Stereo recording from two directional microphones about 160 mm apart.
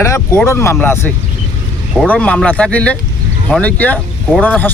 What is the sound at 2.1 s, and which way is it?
Speech, 5° left (ahead or behind).